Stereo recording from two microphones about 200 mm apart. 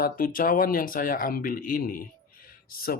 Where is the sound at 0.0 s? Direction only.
45° left (ahead or behind).